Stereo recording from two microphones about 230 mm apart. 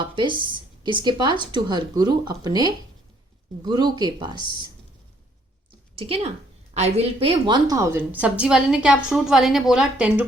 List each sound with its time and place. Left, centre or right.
0.0 s a sound: right
0.9 s speech: centre
6.0 s a woman's voice: right; by 10.2 s centre